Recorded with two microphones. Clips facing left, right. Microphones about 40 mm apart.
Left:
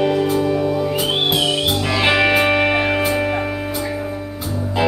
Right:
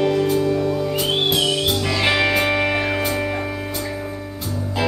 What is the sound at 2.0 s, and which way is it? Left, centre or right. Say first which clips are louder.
Music: left 4 dB; centre.